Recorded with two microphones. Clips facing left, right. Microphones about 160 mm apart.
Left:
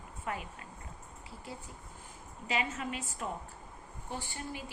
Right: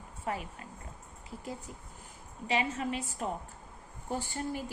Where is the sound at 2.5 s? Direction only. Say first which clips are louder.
Right 3 dB; 35° right (ahead or behind).